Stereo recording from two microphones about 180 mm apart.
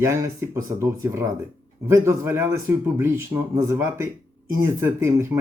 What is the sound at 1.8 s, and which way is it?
Speech, 15° right (ahead or behind).